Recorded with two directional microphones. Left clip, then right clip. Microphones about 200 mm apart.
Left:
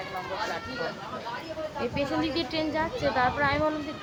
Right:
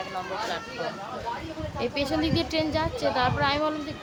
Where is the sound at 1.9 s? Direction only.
20° right (ahead or behind).